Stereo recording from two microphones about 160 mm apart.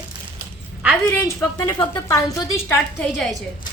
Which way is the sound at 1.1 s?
15° left (ahead or behind).